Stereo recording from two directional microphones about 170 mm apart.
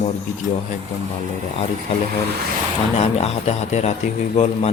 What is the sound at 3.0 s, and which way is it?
A man's voice, 35° left (ahead or behind).